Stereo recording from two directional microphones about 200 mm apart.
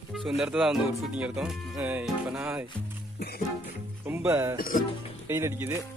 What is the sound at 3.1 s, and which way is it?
Music, 50° left (ahead or behind).